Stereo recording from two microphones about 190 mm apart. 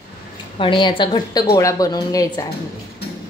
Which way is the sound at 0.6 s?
25° left (ahead or behind).